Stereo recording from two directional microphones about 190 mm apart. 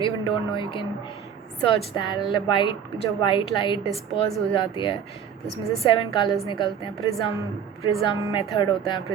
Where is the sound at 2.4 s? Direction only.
25° left (ahead or behind).